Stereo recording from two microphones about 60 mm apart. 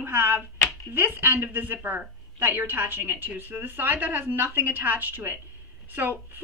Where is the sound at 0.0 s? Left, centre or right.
Right.